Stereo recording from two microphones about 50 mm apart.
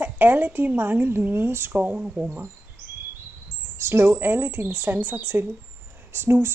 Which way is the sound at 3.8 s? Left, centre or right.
Right.